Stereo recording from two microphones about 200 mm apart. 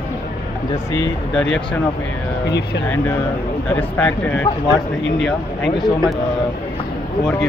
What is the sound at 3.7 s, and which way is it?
Speech, 10° left (ahead or behind).